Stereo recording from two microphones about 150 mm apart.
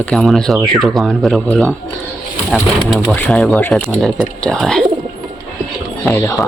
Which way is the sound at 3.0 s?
10° left (ahead or behind).